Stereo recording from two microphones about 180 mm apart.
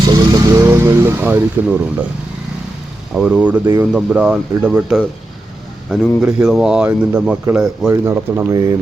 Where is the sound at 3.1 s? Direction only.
5° right (ahead or behind).